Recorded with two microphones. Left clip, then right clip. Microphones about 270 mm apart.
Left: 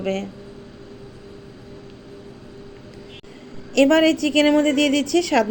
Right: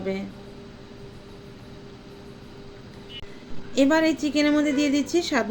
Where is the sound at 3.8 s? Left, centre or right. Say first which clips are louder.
Left 4 dB; centre.